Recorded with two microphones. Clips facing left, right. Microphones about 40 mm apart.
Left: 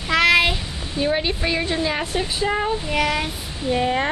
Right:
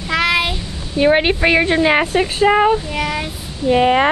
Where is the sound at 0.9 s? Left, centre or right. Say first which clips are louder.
Right 8 dB; right.